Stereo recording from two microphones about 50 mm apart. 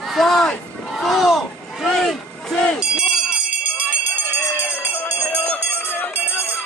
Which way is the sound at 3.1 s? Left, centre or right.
Centre.